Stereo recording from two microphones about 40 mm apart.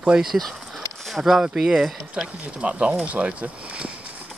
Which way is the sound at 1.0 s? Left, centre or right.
Centre.